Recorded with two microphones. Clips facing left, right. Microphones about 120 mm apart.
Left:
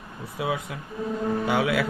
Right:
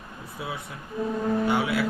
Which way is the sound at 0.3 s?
90° left.